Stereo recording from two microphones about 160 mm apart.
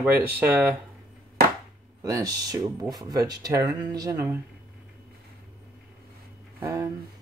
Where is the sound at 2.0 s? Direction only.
20° right (ahead or behind).